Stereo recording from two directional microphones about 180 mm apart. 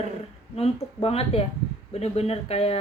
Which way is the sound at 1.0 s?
35° left (ahead or behind).